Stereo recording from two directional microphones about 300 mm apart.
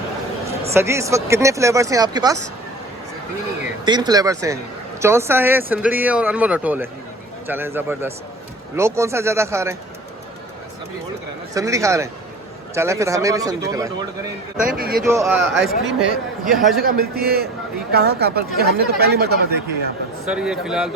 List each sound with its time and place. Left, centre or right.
0.7 s speech: centre
3.8 s speech: centre
11.5 s speech: centre
14.6 s a man's voice: right
15.1 s speech: centre
16.8 s speech: right
20.2 s speech: centre